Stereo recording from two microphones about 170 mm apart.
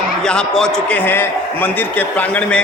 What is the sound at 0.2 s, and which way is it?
A man's voice, 5° left (ahead or behind).